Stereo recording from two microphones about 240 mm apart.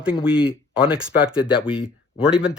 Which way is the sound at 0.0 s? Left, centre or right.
Centre.